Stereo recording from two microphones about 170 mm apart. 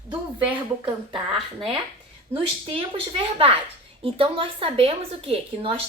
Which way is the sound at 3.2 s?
35° right (ahead or behind).